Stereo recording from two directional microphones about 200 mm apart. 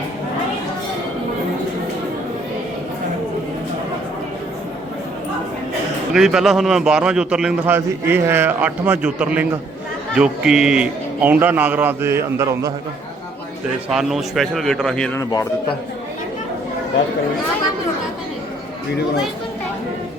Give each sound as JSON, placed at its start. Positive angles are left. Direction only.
{"t": 6.1, "sound": "a man's voice", "side_deg": 0}
{"t": 13.9, "sound": "a man's voice", "side_deg": 0}
{"t": 15.2, "sound": "a man's voice", "side_deg": 15}